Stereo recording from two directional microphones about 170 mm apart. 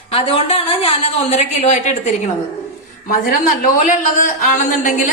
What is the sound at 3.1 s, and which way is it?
A woman's voice, 55° left (ahead or behind).